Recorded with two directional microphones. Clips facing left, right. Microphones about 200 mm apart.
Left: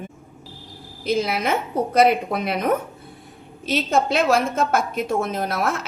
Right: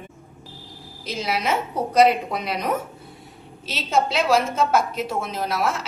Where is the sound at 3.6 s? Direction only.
55° left (ahead or behind).